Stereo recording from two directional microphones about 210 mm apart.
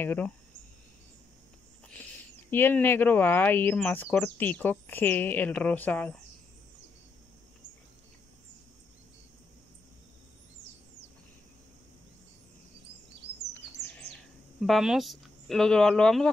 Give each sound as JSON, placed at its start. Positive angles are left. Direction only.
{"t": 0.0, "sound": "speech", "side_deg": 10}
{"t": 2.5, "sound": "speech", "side_deg": 10}
{"t": 13.5, "sound": "chirp", "side_deg": 5}
{"t": 14.6, "sound": "speech", "side_deg": 0}